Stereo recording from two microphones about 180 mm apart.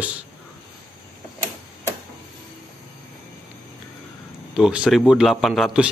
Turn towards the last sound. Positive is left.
turn(degrees=-5)  # may be behind; listen again after turning